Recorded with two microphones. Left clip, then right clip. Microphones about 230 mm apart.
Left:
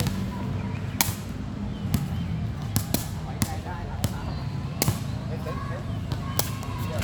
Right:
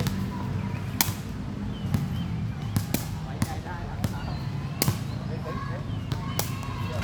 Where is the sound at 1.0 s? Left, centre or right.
Centre.